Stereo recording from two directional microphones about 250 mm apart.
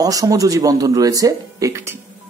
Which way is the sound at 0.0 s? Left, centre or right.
Centre.